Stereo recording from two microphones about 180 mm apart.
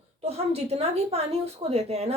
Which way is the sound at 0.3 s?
35° right (ahead or behind).